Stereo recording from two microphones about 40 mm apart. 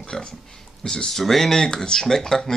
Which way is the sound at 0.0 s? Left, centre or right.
Centre.